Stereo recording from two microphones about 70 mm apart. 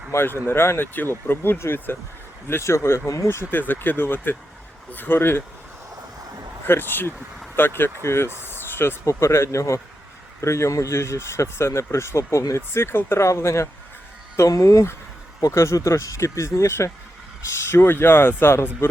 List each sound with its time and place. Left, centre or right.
0.1 s speech: left
3.2 s speech: left
6.7 s speech: left
12.7 s speech: left